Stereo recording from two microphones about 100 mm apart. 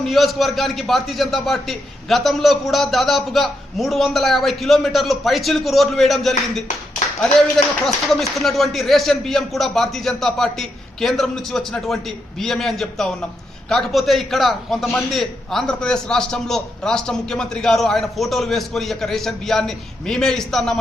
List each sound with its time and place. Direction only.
0.0 s a man's voice: centre (ahead or behind)